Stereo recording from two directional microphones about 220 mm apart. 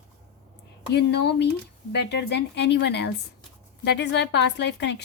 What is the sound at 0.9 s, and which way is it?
A woman's voice, 50° left (ahead or behind).